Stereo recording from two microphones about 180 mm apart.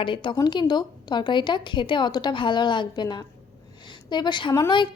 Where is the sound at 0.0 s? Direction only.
25° left (ahead or behind).